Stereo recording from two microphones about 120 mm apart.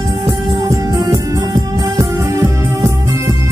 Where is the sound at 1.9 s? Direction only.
25° right (ahead or behind).